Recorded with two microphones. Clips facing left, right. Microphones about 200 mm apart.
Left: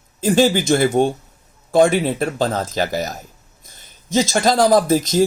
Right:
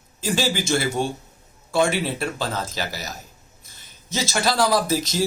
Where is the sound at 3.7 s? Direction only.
50° left (ahead or behind).